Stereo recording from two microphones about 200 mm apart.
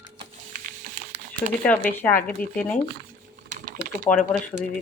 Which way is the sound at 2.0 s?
10° left (ahead or behind).